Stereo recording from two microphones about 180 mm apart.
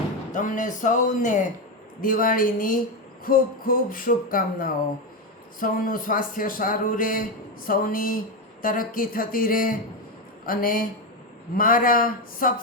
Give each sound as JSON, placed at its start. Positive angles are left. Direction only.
{"t": 0.3, "sound": "speech", "side_deg": 45}